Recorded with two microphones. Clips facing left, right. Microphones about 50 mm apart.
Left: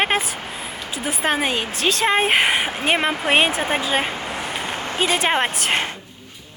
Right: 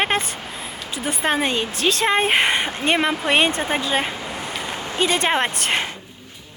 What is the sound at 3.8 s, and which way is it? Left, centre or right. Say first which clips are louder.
Speech: left 1 dB; centre.